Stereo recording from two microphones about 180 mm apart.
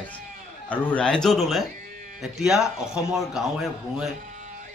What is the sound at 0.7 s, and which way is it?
Speech, 5° left (ahead or behind).